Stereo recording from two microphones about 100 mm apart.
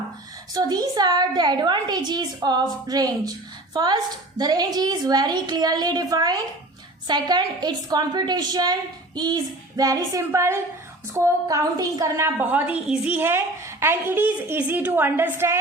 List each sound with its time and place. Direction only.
0.5 s a woman's voice: 40° right (ahead or behind)